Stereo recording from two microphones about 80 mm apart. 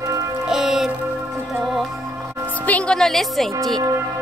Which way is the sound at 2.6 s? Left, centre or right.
Centre.